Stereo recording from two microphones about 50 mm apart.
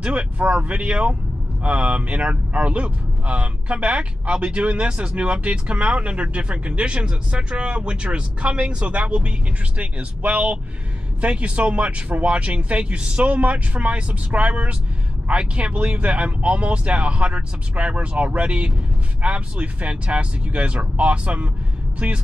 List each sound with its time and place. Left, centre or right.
0.0 s speech: right